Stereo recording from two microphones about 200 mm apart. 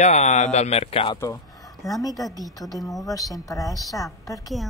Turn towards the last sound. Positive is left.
turn(degrees=15)  # may be behind; listen again after turning